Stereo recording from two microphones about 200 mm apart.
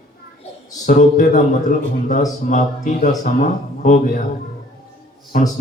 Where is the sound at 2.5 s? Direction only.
40° left (ahead or behind).